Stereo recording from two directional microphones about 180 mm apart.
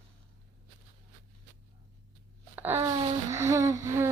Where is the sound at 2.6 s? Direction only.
10° right (ahead or behind).